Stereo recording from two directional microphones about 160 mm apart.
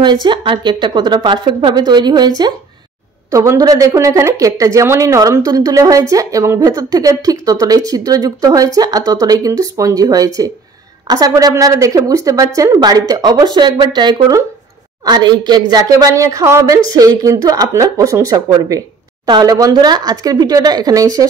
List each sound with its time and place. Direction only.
0.0 s speech: 30° right (ahead or behind)